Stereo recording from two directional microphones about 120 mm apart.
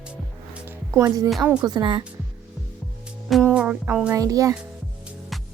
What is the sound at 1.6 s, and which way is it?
Speech, 35° right (ahead or behind).